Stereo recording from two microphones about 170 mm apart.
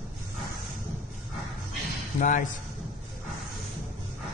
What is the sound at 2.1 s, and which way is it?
Speech, 50° left (ahead or behind).